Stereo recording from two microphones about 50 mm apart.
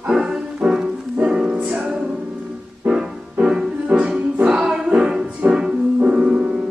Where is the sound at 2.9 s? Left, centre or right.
Centre.